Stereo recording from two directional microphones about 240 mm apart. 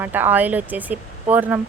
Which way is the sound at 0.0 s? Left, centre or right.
Centre.